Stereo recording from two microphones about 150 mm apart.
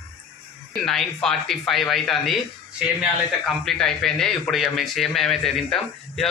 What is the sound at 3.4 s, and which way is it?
Speech, 5° left (ahead or behind).